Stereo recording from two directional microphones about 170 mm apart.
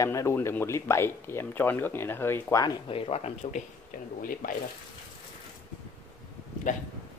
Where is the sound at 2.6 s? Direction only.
30° left (ahead or behind).